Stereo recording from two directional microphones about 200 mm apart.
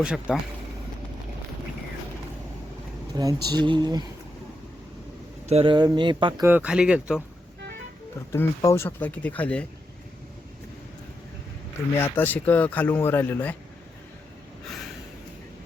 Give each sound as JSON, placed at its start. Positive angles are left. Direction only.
{"t": 0.0, "sound": "speech", "side_deg": -5}
{"t": 3.2, "sound": "speech", "side_deg": -20}
{"t": 5.5, "sound": "speech", "side_deg": -30}
{"t": 6.4, "sound": "speech", "side_deg": -10}
{"t": 8.3, "sound": "speech", "side_deg": 15}
{"t": 11.9, "sound": "speech", "side_deg": 10}